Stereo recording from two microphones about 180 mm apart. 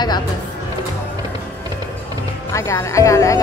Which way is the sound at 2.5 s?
15° left (ahead or behind).